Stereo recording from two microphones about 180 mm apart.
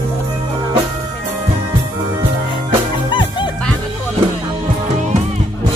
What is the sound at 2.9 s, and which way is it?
Music, 25° left (ahead or behind).